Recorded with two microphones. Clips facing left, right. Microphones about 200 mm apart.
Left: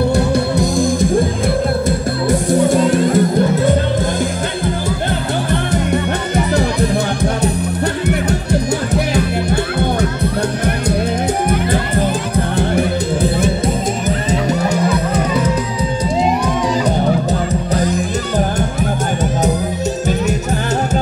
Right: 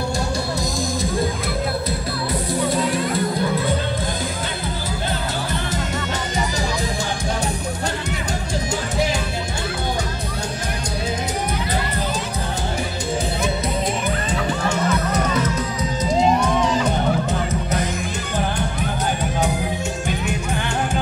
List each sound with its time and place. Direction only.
0.1 s music: 55° left (ahead or behind)
2.7 s music: 45° left (ahead or behind)
5.5 s music: 60° left (ahead or behind)
8.9 s music: 60° left (ahead or behind)
12.4 s music: 60° left (ahead or behind)